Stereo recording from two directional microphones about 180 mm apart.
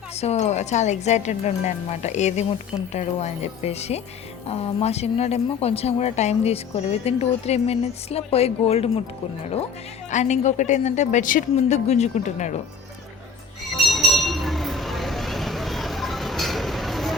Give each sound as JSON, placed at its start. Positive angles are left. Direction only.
{"t": 0.2, "sound": "speech", "side_deg": 40}
{"t": 10.1, "sound": "speech", "side_deg": 40}
{"t": 13.7, "sound": "a sound", "side_deg": 0}